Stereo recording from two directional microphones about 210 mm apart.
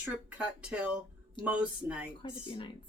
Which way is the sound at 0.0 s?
5° right (ahead or behind).